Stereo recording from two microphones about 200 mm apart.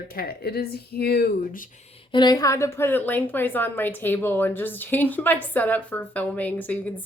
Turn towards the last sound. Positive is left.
turn(degrees=10)  # may be behind; listen again after turning